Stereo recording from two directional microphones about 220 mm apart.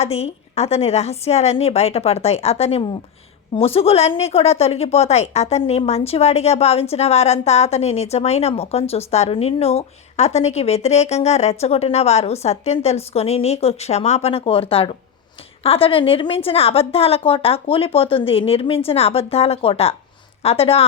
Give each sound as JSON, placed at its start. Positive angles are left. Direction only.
{"t": 0.0, "sound": "speech", "side_deg": 30}